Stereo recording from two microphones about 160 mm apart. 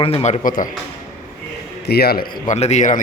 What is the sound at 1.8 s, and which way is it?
Speech, 80° left.